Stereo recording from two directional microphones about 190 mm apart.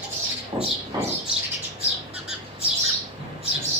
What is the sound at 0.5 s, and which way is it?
Speech, 20° right (ahead or behind).